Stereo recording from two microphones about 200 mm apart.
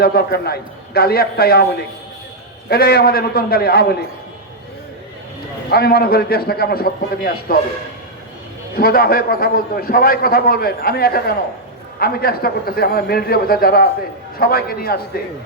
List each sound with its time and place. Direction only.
0.0 s a man's voice: 50° left (ahead or behind)
2.6 s a man's voice: 50° left (ahead or behind)
5.7 s a man's voice: 50° left (ahead or behind)
8.7 s a man's voice: 50° left (ahead or behind)